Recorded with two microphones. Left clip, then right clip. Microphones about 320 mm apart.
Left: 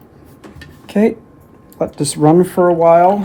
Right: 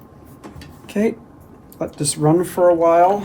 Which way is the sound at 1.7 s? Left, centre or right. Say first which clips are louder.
Left 6 dB; left.